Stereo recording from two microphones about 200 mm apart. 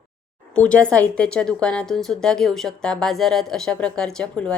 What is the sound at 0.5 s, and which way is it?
A woman's voice, 5° left (ahead or behind).